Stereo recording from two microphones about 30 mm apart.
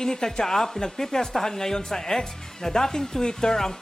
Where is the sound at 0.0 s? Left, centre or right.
Centre.